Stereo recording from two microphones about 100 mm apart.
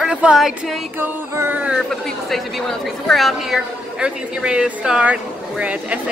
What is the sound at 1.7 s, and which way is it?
A woman's voice, centre (ahead or behind).